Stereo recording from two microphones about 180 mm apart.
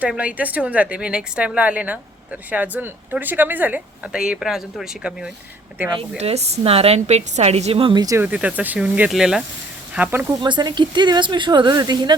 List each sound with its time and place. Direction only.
0.0 s a woman's voice: 5° right (ahead or behind)
5.9 s a woman's voice: 30° right (ahead or behind); by 10.3 s 10° right (ahead or behind)
10.4 s a woman's voice: 25° right (ahead or behind)